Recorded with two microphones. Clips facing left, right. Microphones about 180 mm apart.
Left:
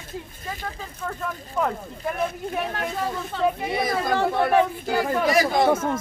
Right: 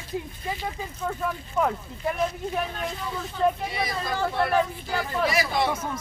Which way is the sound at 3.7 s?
50° left (ahead or behind).